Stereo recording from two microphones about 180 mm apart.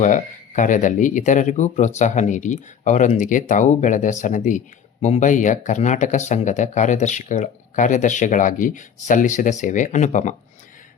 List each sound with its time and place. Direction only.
0.0 s speech: 45° left (ahead or behind)